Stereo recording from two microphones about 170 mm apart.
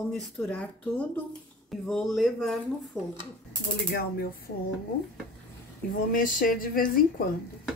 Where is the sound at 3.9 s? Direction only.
60° left (ahead or behind).